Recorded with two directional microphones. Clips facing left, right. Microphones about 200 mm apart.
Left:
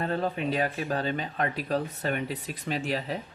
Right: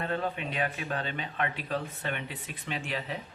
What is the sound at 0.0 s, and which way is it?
Speech, 35° left (ahead or behind).